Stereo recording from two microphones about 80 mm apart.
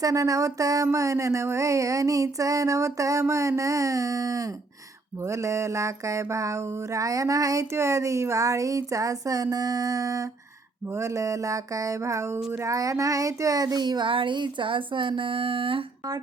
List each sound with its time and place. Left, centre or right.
0.0 s mantra: right
10.9 s a sound: right
12.6 s child singing: right